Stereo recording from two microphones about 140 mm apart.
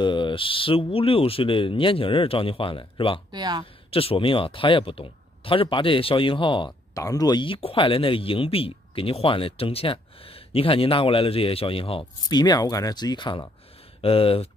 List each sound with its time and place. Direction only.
0.0 s speech: 35° left (ahead or behind)
3.3 s speech: 30° right (ahead or behind)
3.9 s speech: 40° left (ahead or behind)
12.3 s speech: 30° left (ahead or behind)